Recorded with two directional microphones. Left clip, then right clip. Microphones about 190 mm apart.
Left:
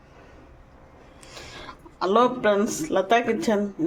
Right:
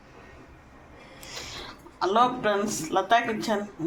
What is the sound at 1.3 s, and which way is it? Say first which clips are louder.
A man's voice: right 2 dB; 50° left (ahead or behind).